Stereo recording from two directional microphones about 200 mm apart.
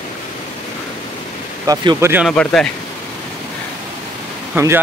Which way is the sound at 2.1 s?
5° right (ahead or behind).